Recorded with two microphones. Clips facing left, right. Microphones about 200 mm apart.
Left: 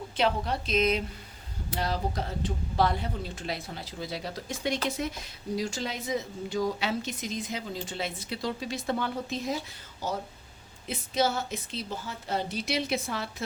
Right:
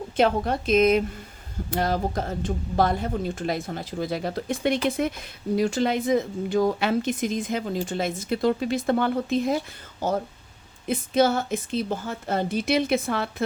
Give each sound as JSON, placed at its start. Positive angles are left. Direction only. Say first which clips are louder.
{"t": 0.2, "sound": "a woman's voice", "louder": "right 6 dB", "side_deg": -50}
{"t": 10.8, "sound": "a woman's voice", "louder": "right 7 dB", "side_deg": -55}